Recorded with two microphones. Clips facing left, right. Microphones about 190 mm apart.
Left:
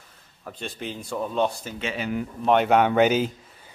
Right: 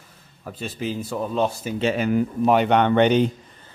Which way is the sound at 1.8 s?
45° right (ahead or behind).